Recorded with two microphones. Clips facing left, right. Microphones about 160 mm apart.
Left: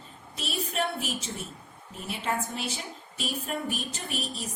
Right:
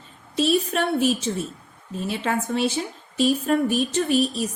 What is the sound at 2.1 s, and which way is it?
A woman's voice, 80° right.